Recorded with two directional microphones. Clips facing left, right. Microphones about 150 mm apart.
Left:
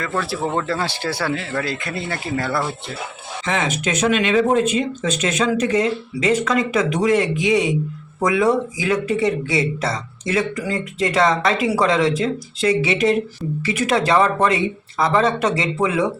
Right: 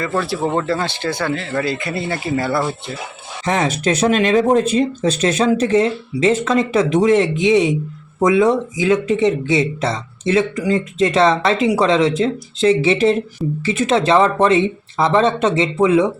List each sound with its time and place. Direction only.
0.0 s speech: 5° right (ahead or behind)
3.4 s speech: 40° right (ahead or behind); by 16.0 s 20° right (ahead or behind)